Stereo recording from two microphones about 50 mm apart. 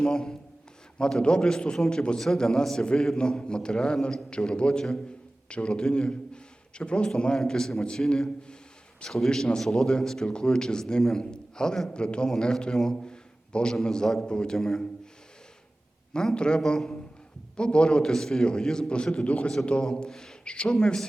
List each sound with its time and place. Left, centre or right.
0.0 s a man's voice: centre
16.1 s a man's voice: centre
19.8 s a man's voice: centre